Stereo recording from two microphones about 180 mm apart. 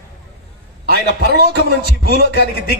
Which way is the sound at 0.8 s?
65° right (ahead or behind).